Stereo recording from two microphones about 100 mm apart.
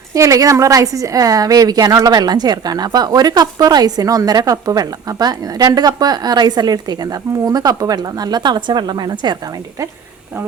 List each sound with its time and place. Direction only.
0.1 s a woman's voice: 35° right (ahead or behind)